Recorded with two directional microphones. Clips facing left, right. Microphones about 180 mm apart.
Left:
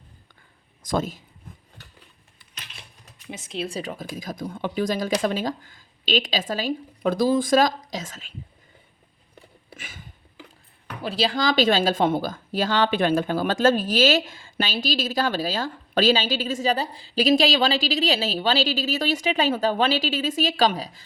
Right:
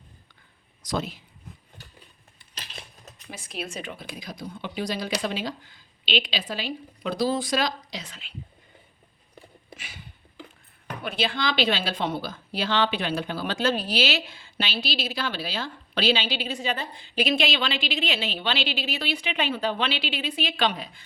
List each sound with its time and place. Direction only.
0.8 s a man's voice: 50° left (ahead or behind)
3.2 s a woman's voice: 20° left (ahead or behind); by 8.3 s 45° left (ahead or behind)
9.7 s a sound: 50° left (ahead or behind)
11.0 s a woman's voice: 35° left (ahead or behind)